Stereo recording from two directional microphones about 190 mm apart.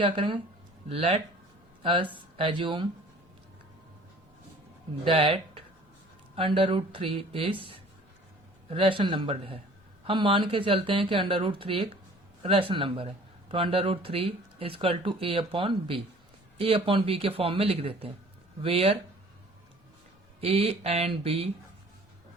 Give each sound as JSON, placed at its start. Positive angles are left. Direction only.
{"t": 0.0, "sound": "speech", "side_deg": -25}
{"t": 5.0, "sound": "speech", "side_deg": -30}
{"t": 8.7, "sound": "a man's voice", "side_deg": -25}
{"t": 20.4, "sound": "a man's voice", "side_deg": -30}